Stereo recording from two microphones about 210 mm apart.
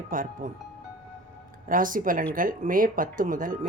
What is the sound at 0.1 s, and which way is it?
Speech, 40° right (ahead or behind).